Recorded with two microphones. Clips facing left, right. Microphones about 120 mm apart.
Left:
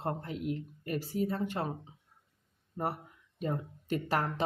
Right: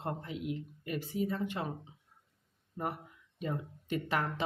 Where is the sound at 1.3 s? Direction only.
40° left (ahead or behind).